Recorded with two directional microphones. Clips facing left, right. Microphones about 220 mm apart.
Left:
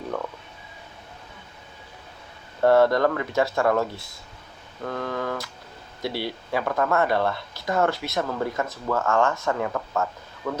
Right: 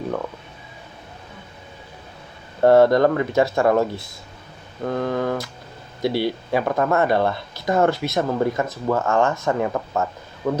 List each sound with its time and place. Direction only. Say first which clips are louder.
2.6 s speech: right 4 dB; 20° right (ahead or behind)